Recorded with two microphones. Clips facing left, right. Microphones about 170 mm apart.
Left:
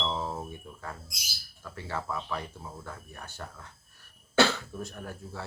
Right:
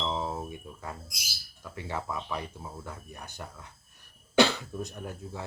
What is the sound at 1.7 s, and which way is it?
Speech, 15° right (ahead or behind).